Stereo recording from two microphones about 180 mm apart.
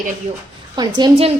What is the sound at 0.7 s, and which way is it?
Speech, 25° right (ahead or behind).